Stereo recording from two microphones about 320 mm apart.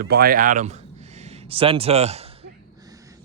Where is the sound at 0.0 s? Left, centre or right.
Right.